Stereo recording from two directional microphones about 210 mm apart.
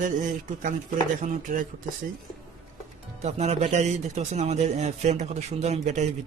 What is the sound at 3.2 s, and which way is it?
A man's voice, 30° right (ahead or behind).